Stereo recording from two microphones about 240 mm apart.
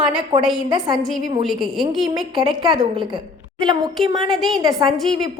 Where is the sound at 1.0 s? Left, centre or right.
Centre.